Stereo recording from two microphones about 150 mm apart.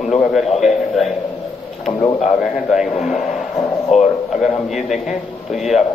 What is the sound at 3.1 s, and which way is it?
Speech, 50° left (ahead or behind).